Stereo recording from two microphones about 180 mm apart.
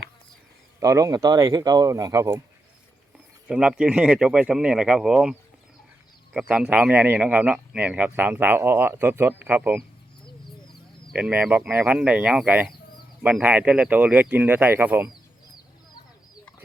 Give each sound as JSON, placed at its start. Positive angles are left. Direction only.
{"t": 0.8, "sound": "speech", "side_deg": -20}
{"t": 3.5, "sound": "speech", "side_deg": -5}
{"t": 6.5, "sound": "speech", "side_deg": -5}
{"t": 11.1, "sound": "speech", "side_deg": -10}